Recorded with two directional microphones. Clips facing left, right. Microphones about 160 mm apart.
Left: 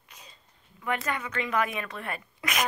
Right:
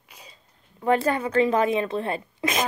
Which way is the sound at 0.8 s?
35° right (ahead or behind).